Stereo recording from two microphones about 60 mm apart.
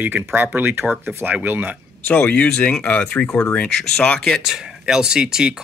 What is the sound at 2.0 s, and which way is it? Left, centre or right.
Speech, centre.